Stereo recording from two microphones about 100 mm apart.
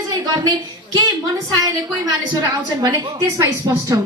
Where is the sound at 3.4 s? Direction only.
40° right (ahead or behind).